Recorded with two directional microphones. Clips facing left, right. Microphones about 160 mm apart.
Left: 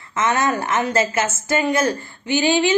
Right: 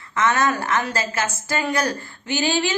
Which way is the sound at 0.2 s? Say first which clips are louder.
Left 1 dB; 25° left (ahead or behind).